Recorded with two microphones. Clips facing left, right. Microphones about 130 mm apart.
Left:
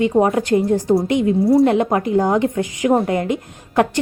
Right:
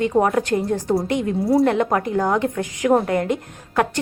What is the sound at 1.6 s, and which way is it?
Speech, 15° left (ahead or behind).